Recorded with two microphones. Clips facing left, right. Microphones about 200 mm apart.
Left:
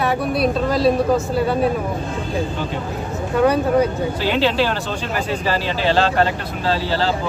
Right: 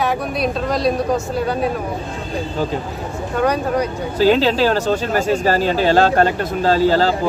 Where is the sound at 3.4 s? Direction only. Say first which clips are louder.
Left 3 dB; 5° left (ahead or behind).